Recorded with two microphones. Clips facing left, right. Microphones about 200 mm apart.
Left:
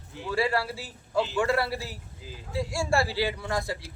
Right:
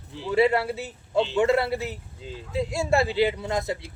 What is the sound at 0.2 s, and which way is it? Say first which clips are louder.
A man's voice: right 6 dB; 20° right (ahead or behind).